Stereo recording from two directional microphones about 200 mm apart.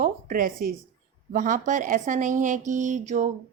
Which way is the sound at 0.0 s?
45° right (ahead or behind).